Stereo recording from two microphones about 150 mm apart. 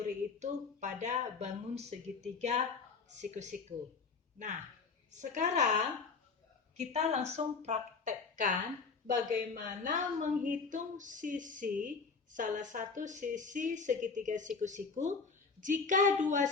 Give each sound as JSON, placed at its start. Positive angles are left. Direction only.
{"t": 0.3, "sound": "a woman's voice", "side_deg": -50}
{"t": 5.2, "sound": "a woman's voice", "side_deg": -55}
{"t": 6.7, "sound": "a woman's voice", "side_deg": -45}